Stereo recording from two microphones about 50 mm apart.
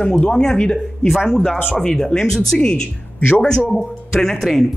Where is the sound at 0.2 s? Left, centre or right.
Centre.